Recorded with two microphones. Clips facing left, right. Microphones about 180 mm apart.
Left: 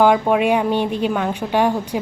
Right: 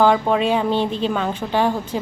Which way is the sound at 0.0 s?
10° left (ahead or behind).